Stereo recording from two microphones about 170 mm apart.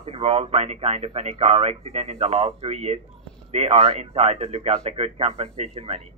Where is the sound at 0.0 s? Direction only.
35° right (ahead or behind).